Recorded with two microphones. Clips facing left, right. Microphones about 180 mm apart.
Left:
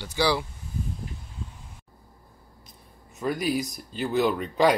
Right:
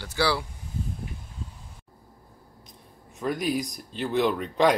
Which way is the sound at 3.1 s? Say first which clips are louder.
Left 1 dB; centre (ahead or behind).